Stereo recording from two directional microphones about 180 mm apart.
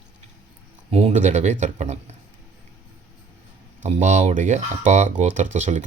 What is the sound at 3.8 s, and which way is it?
Speech, 40° right (ahead or behind).